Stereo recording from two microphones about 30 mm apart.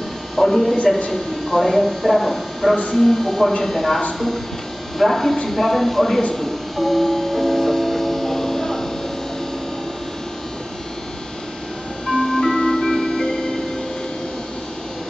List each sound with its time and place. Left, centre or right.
0.4 s speech: centre
6.3 s music: centre
12.2 s music: centre